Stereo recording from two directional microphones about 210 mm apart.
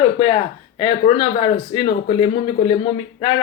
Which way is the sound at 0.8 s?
25° left (ahead or behind).